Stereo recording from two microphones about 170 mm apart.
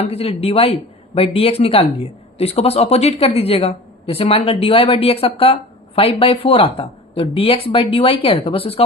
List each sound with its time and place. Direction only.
0.0 s speech: 35° left (ahead or behind)